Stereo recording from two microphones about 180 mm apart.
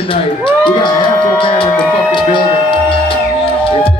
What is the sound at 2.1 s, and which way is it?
Music, 30° left (ahead or behind).